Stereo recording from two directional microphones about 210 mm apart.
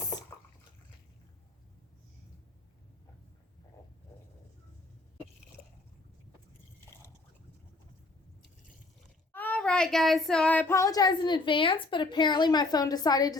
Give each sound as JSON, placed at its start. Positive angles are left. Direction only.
{"t": 9.3, "sound": "child singing", "side_deg": 10}